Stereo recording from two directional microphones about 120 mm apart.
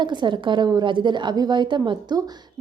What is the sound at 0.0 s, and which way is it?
A woman's voice, 40° right (ahead or behind).